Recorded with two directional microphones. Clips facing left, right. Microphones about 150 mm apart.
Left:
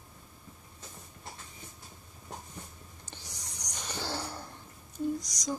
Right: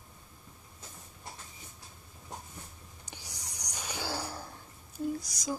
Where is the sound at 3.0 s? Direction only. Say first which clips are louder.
Right 1 dB; 10° right (ahead or behind).